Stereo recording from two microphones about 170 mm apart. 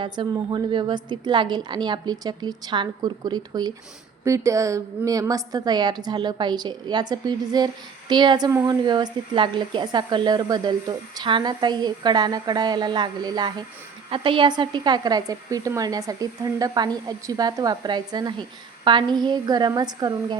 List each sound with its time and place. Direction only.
0.0 s a woman's voice: 25° right (ahead or behind)